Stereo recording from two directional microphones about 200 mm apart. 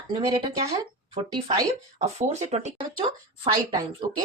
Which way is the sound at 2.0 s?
30° right (ahead or behind).